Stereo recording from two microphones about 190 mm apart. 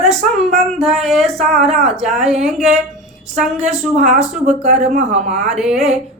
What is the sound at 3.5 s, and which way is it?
Speech, 35° right (ahead or behind).